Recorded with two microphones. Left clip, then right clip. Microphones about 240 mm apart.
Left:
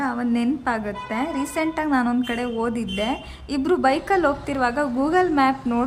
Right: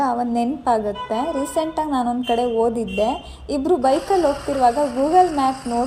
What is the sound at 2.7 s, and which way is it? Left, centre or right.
A woman's voice, centre.